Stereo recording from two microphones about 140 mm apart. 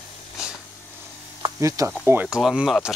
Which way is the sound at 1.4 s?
25° right (ahead or behind).